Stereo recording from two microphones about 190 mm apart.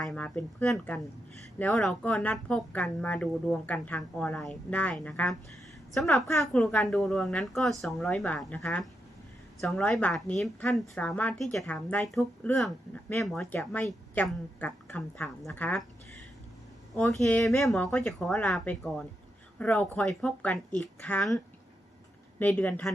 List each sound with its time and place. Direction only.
0.0 s a woman's voice: 5° left (ahead or behind)
6.1 s speech: 15° left (ahead or behind)
6.4 s a woman's voice: 5° left (ahead or behind)
17.1 s a woman's voice: centre (ahead or behind)